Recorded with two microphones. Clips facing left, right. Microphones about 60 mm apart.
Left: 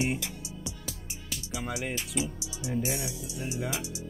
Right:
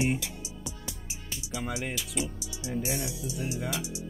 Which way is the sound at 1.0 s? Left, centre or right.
Centre.